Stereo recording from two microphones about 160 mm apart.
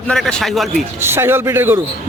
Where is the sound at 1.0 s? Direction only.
15° right (ahead or behind).